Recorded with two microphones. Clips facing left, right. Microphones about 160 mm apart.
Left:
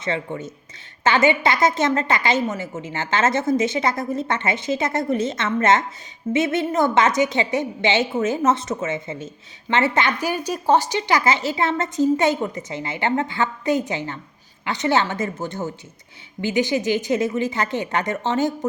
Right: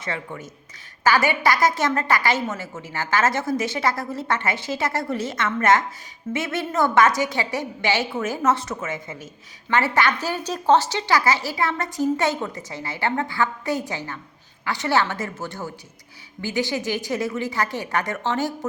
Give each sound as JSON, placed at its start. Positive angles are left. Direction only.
{"t": 0.0, "sound": "a woman's voice", "side_deg": 25}